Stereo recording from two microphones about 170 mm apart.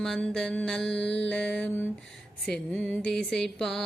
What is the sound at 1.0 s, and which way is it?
Mantra, 90° left.